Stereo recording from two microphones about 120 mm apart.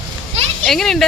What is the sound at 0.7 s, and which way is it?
Speech, 5° left (ahead or behind).